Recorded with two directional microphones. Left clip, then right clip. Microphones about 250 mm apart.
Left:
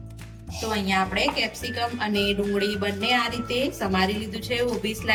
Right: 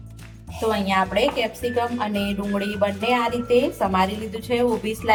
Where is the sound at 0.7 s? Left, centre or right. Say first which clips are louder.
Right 4 dB; right.